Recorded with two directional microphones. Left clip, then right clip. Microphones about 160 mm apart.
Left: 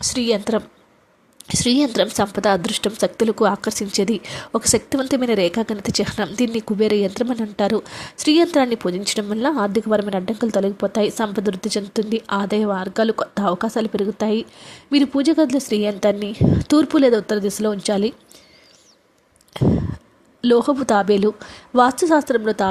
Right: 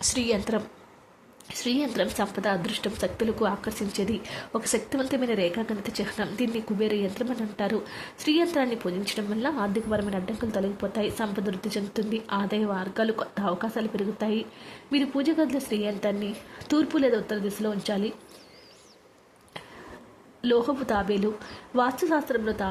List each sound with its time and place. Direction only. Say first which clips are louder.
0.0 s speech: left 6 dB; 35° left (ahead or behind)
19.6 s speech: left 19 dB; 40° left (ahead or behind)